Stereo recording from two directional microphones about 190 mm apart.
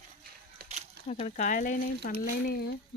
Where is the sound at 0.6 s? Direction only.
55° right (ahead or behind).